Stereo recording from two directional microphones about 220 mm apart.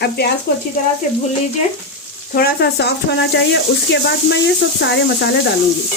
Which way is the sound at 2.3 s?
45° left (ahead or behind).